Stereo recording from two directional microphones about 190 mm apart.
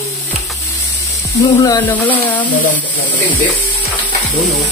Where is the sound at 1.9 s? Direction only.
10° left (ahead or behind).